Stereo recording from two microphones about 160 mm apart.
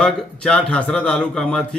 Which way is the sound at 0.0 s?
5° left (ahead or behind).